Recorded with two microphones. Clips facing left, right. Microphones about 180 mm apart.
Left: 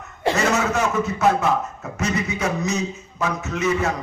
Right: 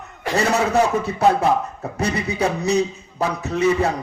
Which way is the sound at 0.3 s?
35° right (ahead or behind).